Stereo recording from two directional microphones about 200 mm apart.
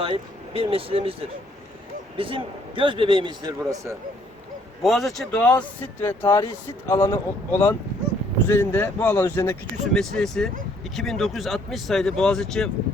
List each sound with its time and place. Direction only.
0.0 s a man's voice: 25° right (ahead or behind)
4.8 s speech: centre (ahead or behind)